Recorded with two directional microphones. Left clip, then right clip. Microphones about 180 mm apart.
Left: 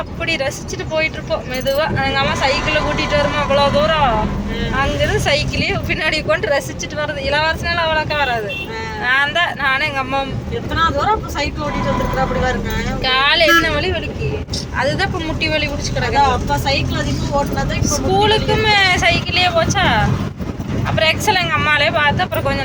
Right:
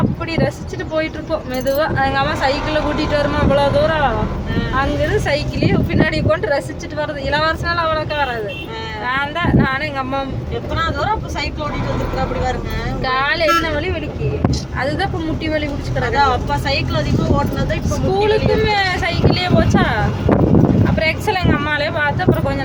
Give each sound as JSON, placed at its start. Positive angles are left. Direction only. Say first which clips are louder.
{"t": 0.3, "sound": "speech", "louder": "left 2 dB", "side_deg": -10}
{"t": 0.9, "sound": "speech", "louder": "left 2 dB", "side_deg": -25}
{"t": 13.1, "sound": "speech", "louder": "left 3 dB", "side_deg": -5}
{"t": 17.8, "sound": "speech", "louder": "left 2 dB", "side_deg": -5}